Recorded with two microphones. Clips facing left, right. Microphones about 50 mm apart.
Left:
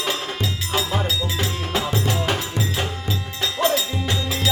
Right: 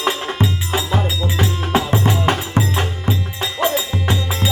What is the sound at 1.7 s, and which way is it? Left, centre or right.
Music, right.